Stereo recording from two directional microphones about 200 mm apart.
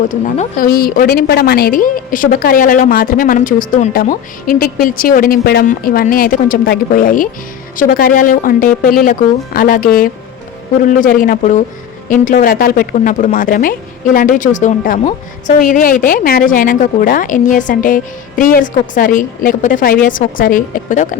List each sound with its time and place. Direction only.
0.1 s speech: 40° left (ahead or behind)